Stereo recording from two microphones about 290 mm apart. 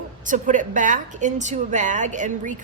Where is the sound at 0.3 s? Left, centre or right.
Right.